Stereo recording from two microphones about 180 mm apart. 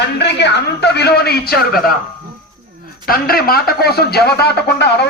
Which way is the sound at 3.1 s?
55° left (ahead or behind).